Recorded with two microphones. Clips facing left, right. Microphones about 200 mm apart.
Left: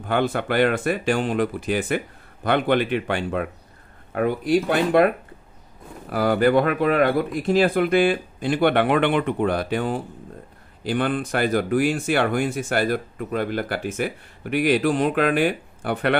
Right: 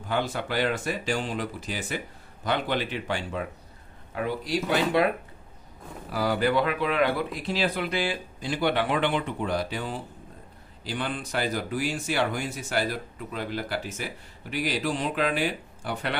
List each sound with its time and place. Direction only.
0.0 s speech: 60° left (ahead or behind)